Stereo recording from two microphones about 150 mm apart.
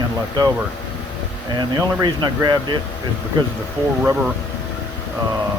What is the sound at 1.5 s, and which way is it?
Speech, 30° right (ahead or behind).